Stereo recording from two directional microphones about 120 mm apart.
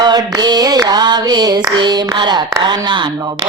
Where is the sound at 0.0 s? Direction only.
35° right (ahead or behind).